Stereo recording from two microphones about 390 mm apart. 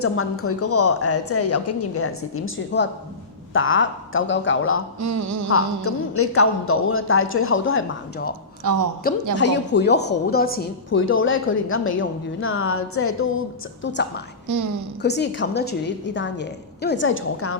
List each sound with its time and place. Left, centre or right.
0.0 s a woman's voice: left
4.9 s a sound: right
5.5 s a woman's voice: left
8.7 s a sound: right
9.0 s a woman's voice: left
14.4 s a woman's voice: right
15.0 s a woman's voice: left